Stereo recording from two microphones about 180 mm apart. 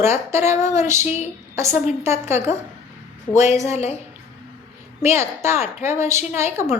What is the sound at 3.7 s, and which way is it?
Speech, 35° left (ahead or behind).